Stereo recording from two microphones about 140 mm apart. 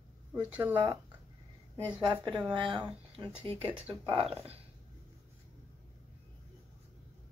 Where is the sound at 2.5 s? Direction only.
35° right (ahead or behind).